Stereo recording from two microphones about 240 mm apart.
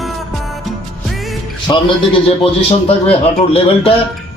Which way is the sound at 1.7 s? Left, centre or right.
Centre.